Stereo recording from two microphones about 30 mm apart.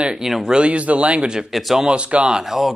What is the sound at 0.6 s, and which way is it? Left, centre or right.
Speech, right.